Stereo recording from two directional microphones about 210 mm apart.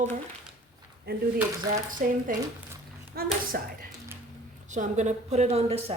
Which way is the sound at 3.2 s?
45° right (ahead or behind).